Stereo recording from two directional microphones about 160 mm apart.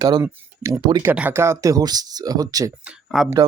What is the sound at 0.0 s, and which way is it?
Speech, 20° right (ahead or behind).